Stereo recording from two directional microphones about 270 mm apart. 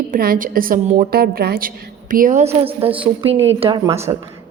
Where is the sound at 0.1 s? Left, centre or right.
Right.